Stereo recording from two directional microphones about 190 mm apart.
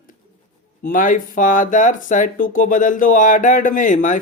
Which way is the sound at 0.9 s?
45° left (ahead or behind).